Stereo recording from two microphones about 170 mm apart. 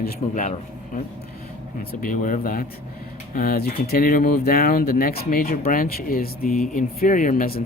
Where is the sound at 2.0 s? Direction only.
50° left (ahead or behind).